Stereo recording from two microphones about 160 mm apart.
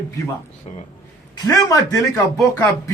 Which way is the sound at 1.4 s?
20° left (ahead or behind).